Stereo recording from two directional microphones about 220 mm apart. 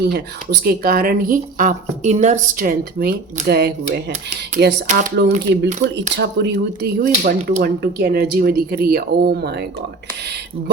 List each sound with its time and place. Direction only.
0.0 s speech: 45° right (ahead or behind)